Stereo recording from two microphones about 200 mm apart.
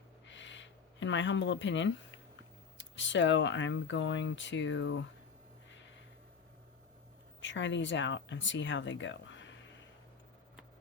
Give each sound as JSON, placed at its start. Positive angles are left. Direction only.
{"t": 0.3, "sound": "a sound", "side_deg": 65}
{"t": 2.7, "sound": "speech", "side_deg": 65}
{"t": 7.4, "sound": "speech", "side_deg": 65}